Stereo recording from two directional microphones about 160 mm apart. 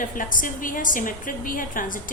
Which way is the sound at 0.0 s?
55° left (ahead or behind).